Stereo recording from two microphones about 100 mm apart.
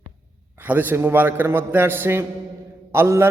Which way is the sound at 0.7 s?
20° right (ahead or behind).